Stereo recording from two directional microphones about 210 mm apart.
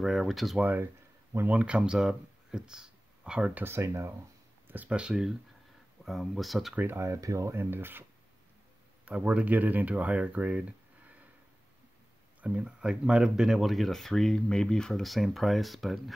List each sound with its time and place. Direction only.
0.0 s speech: centre (ahead or behind)
9.0 s speech: 5° right (ahead or behind)
12.4 s speech: 5° right (ahead or behind)